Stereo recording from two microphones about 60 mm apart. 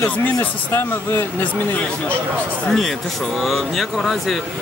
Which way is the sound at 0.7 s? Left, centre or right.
Left.